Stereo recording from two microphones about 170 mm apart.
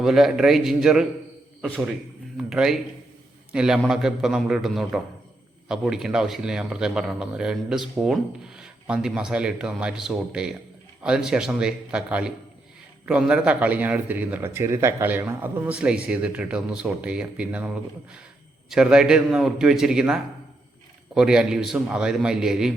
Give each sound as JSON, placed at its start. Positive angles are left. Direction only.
{"t": 0.0, "sound": "speech", "side_deg": 0}
{"t": 18.7, "sound": "speech", "side_deg": -5}
{"t": 21.2, "sound": "speech", "side_deg": -5}